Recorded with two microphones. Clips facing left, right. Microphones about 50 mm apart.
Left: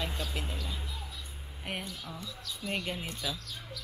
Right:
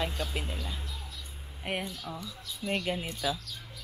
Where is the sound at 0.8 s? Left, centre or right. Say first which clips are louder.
Left 1 dB; centre.